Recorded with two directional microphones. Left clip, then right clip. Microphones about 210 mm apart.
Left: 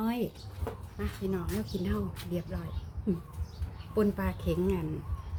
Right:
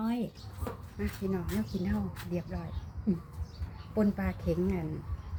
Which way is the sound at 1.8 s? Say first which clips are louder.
Left 1 dB; 20° left (ahead or behind).